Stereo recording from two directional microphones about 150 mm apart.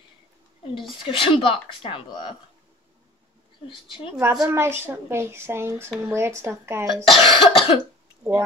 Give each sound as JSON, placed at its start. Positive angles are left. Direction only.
{"t": 1.0, "sound": "speech", "side_deg": 35}
{"t": 4.2, "sound": "speech", "side_deg": -20}
{"t": 7.2, "sound": "speech", "side_deg": 40}
{"t": 8.2, "sound": "speech", "side_deg": -10}